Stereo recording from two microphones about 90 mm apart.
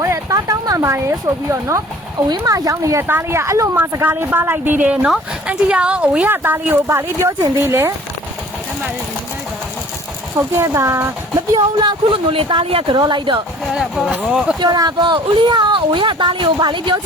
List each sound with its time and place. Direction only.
0.0 s speech: 35° right (ahead or behind)
2.3 s speech: 45° right (ahead or behind)
3.0 s a woman's voice: 25° right (ahead or behind)
10.3 s speech: 30° right (ahead or behind)
11.3 s speech: 50° right (ahead or behind)
12.1 s speech: 80° right; by 13.4 s 60° right (ahead or behind)
13.7 s a woman's voice: 5° right (ahead or behind)
14.6 s speech: 50° right (ahead or behind)